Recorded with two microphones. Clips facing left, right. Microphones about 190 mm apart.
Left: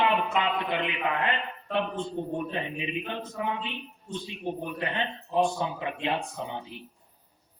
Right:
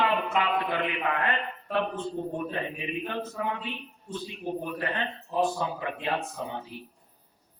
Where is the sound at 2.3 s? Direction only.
20° left (ahead or behind).